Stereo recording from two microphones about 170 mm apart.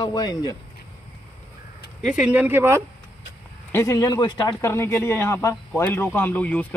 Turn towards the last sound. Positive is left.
turn(degrees=10)  # may be behind; listen again after turning